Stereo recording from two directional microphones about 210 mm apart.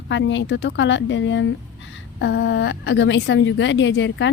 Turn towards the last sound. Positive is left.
turn(degrees=60)  # may be behind; listen again after turning